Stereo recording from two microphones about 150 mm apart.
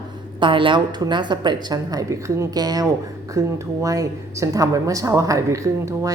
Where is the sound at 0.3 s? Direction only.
35° right (ahead or behind).